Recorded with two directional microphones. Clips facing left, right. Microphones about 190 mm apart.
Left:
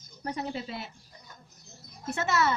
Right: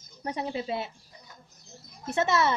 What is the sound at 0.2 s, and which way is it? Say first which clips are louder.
Speech: right 2 dB; 25° right (ahead or behind).